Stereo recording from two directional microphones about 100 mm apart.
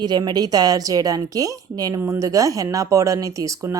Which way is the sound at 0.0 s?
45° right (ahead or behind).